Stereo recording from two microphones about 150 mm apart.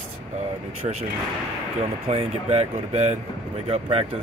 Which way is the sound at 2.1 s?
45° right (ahead or behind).